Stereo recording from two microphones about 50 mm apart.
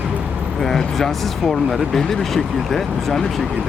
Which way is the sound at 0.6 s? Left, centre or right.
Centre.